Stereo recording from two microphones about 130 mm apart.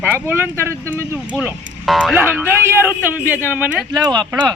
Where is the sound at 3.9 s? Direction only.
30° right (ahead or behind).